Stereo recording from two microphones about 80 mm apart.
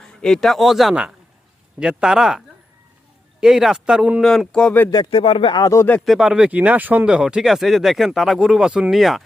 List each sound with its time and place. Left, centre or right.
0.0 s a man's voice: centre
3.4 s speech: centre
4.2 s speech: centre
4.9 s speech: left
5.6 s speech: left
6.1 s speech: centre